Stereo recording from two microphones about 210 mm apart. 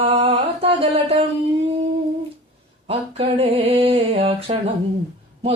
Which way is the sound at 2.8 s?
30° right (ahead or behind).